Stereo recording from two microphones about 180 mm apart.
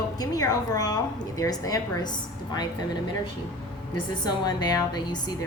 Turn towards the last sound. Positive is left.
turn(degrees=25)  # may be behind; listen again after turning